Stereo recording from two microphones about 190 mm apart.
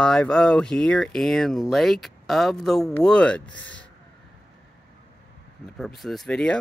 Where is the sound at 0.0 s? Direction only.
5° left (ahead or behind).